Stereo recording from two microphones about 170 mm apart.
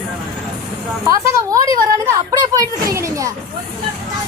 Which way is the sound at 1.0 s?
20° right (ahead or behind).